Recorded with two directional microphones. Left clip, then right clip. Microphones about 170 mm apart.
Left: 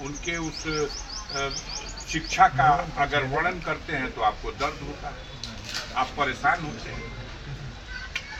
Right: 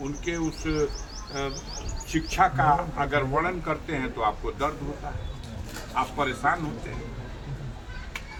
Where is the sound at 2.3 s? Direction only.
15° right (ahead or behind).